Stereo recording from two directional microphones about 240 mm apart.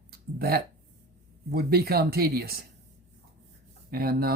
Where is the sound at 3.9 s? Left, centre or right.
Right.